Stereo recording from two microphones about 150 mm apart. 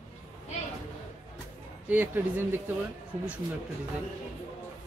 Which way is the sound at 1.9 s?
10° right (ahead or behind).